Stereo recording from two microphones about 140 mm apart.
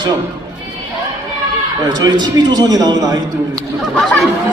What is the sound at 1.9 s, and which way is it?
A man's voice, 30° right (ahead or behind).